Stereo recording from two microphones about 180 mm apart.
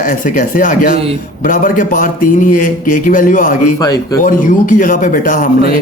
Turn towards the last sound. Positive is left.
turn(degrees=50)  # may be behind; listen again after turning